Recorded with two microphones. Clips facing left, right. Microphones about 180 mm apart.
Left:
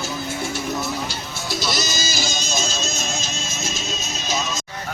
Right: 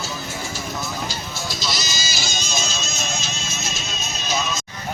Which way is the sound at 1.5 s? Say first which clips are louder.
Left 7 dB; 50° left (ahead or behind).